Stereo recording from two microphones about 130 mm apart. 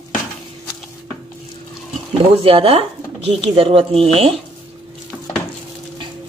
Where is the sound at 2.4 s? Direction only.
45° right (ahead or behind).